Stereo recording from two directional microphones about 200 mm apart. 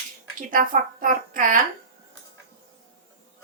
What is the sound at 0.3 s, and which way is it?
A woman's voice, 45° right (ahead or behind).